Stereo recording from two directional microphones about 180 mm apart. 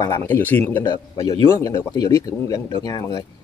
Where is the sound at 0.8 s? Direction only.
20° left (ahead or behind).